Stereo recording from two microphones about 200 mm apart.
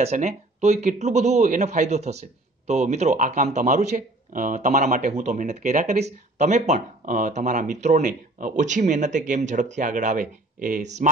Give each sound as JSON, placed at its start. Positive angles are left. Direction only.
{"t": 0.0, "sound": "a man's voice", "side_deg": -35}